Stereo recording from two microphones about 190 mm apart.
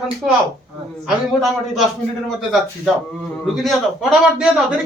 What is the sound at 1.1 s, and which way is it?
Speech, centre (ahead or behind).